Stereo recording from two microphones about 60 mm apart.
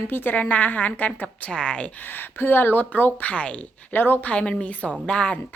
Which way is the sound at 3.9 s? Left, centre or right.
Left.